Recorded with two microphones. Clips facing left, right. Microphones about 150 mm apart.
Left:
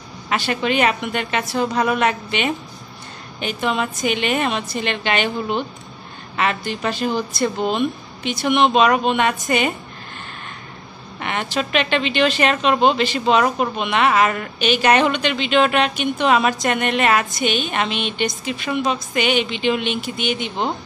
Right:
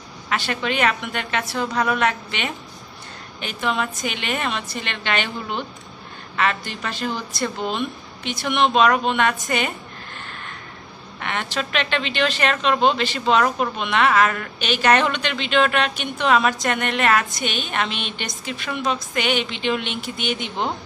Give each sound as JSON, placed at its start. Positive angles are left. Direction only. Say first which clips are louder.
{"t": 0.3, "sound": "a woman's voice", "louder": "left 4 dB", "side_deg": 15}
{"t": 11.1, "sound": "a woman's voice", "louder": "left 3 dB", "side_deg": 15}